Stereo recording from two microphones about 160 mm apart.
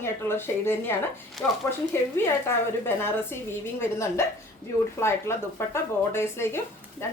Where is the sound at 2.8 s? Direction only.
15° left (ahead or behind).